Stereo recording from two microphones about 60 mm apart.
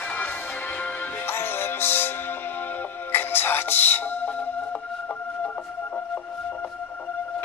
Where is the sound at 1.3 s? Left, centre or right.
Left.